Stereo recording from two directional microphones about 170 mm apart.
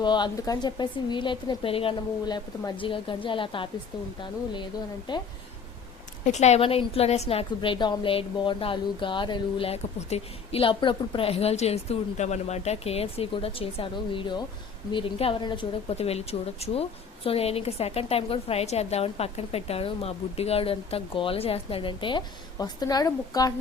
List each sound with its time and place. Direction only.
0.0 s a woman's voice: 25° left (ahead or behind)
5.1 s a woman's voice: 25° left (ahead or behind)
6.2 s a woman's voice: 40° left (ahead or behind); by 23.5 s 20° left (ahead or behind)